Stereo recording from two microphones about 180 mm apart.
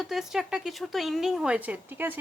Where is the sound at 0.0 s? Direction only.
Centre (ahead or behind).